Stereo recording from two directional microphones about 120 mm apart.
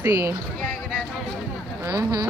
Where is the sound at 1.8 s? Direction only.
30° right (ahead or behind).